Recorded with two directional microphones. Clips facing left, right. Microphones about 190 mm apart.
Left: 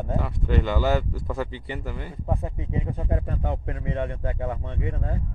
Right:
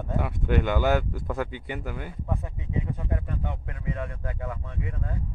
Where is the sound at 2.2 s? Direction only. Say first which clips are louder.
Left 7 dB; 35° left (ahead or behind).